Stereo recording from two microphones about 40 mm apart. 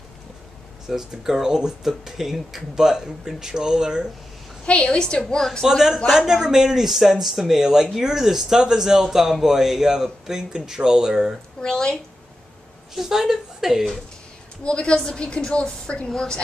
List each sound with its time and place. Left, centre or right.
0.8 s speech: centre
4.6 s a woman's voice: left
5.7 s speech: centre
11.6 s a woman's voice: centre
12.9 s speech: centre
14.6 s a woman's voice: left